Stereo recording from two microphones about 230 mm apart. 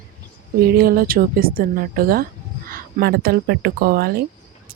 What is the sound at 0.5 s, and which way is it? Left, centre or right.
Speech, right.